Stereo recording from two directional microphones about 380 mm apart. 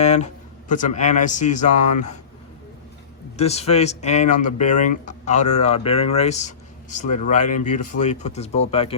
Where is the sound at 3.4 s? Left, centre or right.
Centre.